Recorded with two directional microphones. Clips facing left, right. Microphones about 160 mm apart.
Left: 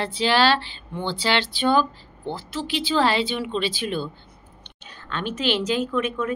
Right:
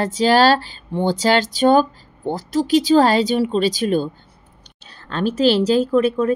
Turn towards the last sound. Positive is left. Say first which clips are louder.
# right 8 dB
turn(degrees=-35)  # may be behind; listen again after turning